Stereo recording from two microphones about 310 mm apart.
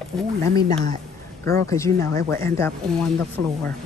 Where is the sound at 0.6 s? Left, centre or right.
Right.